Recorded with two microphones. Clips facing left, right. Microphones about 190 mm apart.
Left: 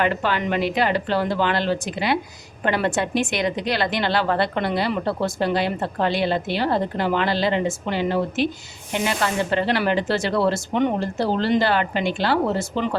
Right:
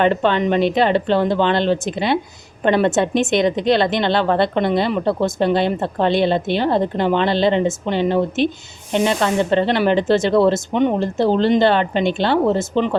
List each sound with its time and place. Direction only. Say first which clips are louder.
0.0 s a woman's voice: right 6 dB; 25° right (ahead or behind)